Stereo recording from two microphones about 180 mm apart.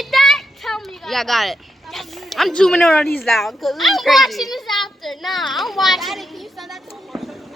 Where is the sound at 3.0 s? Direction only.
5° left (ahead or behind).